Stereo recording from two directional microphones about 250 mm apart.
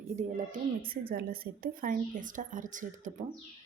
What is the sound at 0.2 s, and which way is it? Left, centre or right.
Speech, right.